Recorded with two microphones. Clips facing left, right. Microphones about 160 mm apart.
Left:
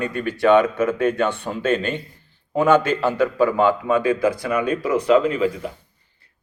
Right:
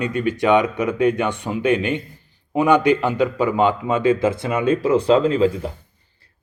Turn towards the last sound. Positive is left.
turn(degrees=-30)  # may be behind; listen again after turning